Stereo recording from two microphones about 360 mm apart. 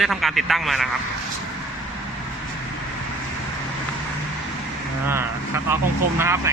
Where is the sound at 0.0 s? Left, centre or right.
Centre.